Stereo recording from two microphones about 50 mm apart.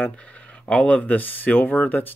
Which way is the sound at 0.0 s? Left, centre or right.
Left.